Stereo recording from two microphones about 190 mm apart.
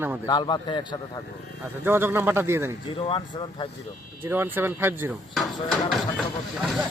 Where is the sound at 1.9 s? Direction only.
10° right (ahead or behind).